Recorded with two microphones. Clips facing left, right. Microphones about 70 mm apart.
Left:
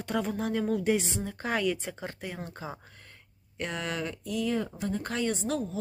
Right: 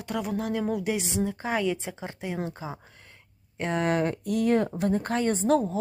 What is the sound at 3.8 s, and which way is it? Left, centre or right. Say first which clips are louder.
Speech: right 9 dB; right.